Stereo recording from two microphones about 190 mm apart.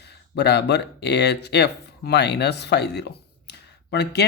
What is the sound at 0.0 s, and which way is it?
Speech, 60° left (ahead or behind).